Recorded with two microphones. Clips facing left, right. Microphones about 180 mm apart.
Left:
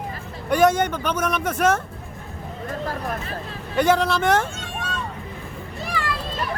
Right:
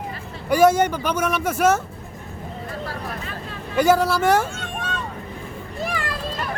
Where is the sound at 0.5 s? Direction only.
10° right (ahead or behind).